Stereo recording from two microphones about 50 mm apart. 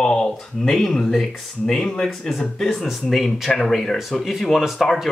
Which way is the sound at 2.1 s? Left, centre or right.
Centre.